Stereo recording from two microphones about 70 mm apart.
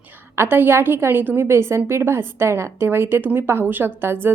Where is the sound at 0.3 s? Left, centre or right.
Right.